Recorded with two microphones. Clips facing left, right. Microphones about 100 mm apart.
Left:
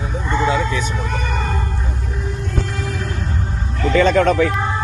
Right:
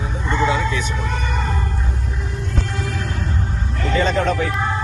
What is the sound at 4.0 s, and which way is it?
Speech, 85° left.